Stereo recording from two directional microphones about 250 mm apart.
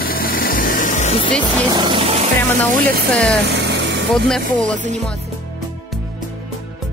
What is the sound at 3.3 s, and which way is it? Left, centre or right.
Vehicle, right.